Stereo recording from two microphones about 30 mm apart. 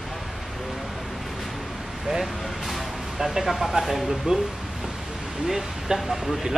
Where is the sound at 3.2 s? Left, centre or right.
Centre.